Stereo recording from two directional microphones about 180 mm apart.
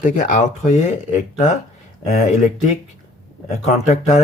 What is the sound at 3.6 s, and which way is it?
Speech, 40° left (ahead or behind).